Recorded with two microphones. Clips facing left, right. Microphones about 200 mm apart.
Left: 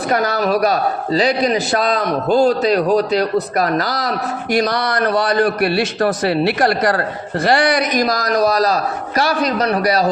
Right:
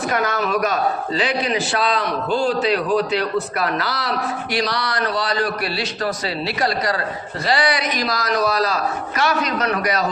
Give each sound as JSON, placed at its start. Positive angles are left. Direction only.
{"t": 0.1, "sound": "a man's voice", "side_deg": 35}